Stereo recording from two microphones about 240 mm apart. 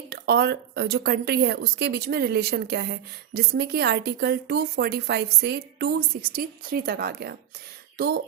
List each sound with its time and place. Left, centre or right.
0.1 s speech: right